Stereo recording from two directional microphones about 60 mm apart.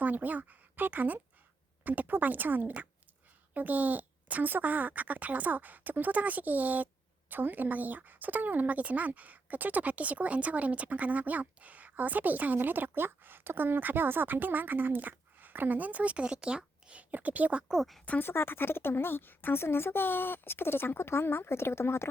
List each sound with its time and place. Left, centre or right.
0.0 s speech: right; by 17.8 s centre
18.2 s speech: left